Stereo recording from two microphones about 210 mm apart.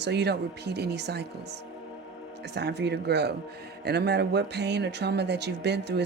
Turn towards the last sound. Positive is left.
turn(degrees=-55)  # may be behind; listen again after turning